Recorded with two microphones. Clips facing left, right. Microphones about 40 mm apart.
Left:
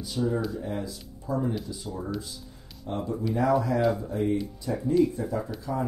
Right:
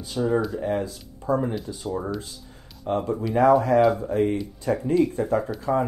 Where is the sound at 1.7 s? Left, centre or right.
Right.